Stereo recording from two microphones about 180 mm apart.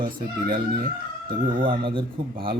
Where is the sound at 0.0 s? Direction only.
50° right (ahead or behind).